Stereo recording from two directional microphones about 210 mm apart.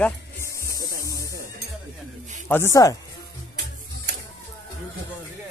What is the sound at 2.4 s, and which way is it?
Speech, 10° left (ahead or behind).